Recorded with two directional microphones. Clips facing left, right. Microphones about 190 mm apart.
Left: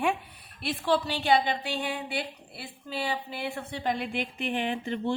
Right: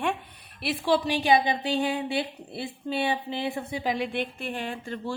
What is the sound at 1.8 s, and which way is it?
Speech, 25° right (ahead or behind).